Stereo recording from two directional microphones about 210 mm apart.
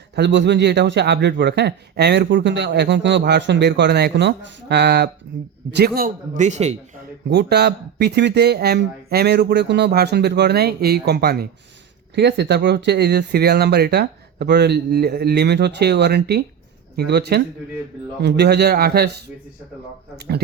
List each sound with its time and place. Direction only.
0.2 s a man's voice: 55° right (ahead or behind)
5.7 s a man's voice: 45° right (ahead or behind)
7.3 s speech: 50° right (ahead or behind)
20.1 s speech: 50° right (ahead or behind)